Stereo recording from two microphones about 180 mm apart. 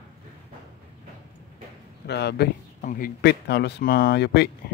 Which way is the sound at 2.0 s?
70° left (ahead or behind).